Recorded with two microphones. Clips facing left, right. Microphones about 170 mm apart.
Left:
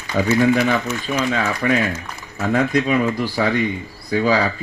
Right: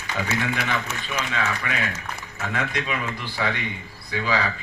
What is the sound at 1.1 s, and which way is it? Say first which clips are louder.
Speech: left 6 dB; 35° left (ahead or behind).